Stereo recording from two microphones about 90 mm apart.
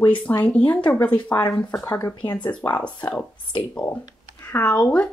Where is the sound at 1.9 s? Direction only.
35° left (ahead or behind).